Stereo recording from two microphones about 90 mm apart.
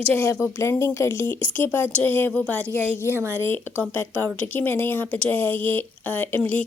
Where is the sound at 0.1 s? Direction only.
25° left (ahead or behind).